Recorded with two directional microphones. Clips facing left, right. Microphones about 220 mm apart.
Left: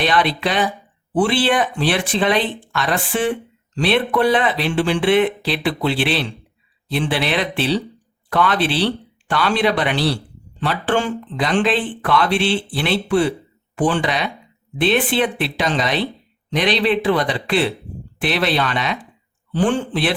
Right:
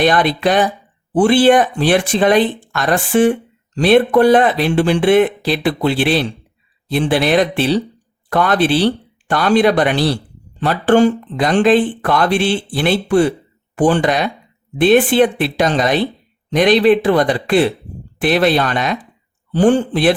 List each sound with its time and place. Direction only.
0.0 s speech: 45° right (ahead or behind)